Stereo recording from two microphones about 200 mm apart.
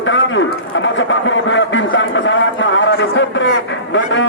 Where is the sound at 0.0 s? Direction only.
70° left (ahead or behind).